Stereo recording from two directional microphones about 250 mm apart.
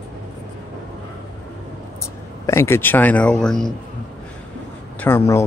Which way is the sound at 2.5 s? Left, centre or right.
Centre.